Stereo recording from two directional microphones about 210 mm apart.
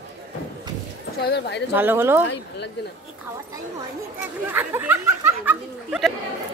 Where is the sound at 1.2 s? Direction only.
50° left (ahead or behind).